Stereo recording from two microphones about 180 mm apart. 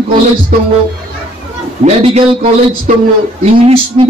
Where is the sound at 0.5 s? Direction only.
50° right (ahead or behind).